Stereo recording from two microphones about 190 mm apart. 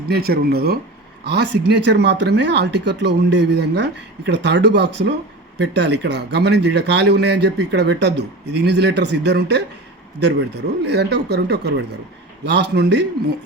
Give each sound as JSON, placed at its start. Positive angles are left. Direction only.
{"t": 0.1, "sound": "a man's voice", "side_deg": -55}